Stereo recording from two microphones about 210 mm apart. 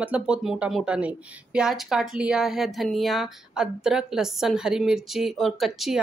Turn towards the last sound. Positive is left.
turn(degrees=0)  # may be behind; listen again after turning